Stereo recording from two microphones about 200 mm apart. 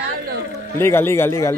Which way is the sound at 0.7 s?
10° left (ahead or behind).